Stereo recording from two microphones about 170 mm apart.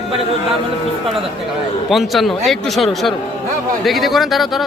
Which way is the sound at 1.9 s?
Centre (ahead or behind).